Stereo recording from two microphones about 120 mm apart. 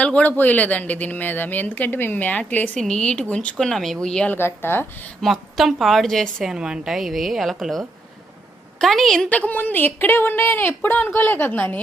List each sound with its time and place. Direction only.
0.0 s a woman's voice: 10° left (ahead or behind)
4.4 s a woman's voice: 20° left (ahead or behind)
5.2 s a woman's voice: centre (ahead or behind); by 11.8 s 15° left (ahead or behind)